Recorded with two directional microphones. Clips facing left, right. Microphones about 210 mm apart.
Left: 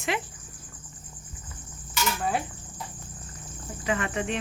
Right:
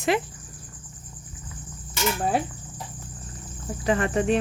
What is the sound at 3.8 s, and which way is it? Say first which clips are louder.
Speech: right 6 dB; 35° right (ahead or behind).